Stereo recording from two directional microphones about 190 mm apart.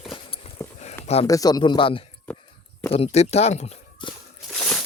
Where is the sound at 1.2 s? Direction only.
20° left (ahead or behind).